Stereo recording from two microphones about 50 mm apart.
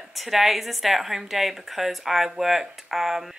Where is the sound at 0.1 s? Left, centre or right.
Centre.